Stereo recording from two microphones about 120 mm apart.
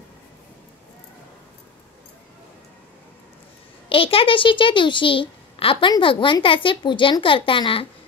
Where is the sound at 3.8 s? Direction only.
50° left (ahead or behind).